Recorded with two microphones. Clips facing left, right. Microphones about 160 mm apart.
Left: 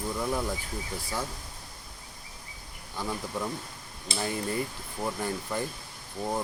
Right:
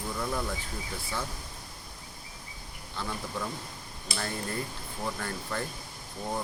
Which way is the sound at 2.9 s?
15° left (ahead or behind).